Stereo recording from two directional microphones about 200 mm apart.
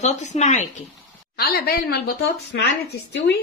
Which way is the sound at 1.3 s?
50° left (ahead or behind).